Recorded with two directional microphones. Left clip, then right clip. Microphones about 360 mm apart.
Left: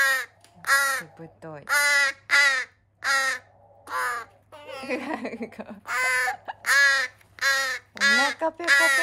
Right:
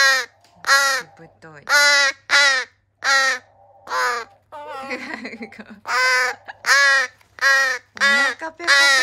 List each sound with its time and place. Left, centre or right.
0.0 s crow: centre
1.1 s speech: centre
1.6 s crow: centre
4.5 s speech: centre
5.9 s fowl: centre
6.6 s crow: centre
8.5 s speech: centre